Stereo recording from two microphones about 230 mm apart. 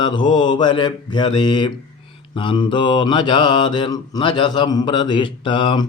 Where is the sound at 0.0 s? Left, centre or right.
Centre.